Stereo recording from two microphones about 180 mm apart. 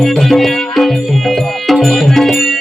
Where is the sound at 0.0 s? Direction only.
Centre (ahead or behind).